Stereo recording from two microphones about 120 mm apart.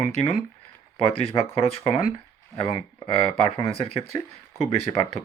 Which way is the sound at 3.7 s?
55° left (ahead or behind).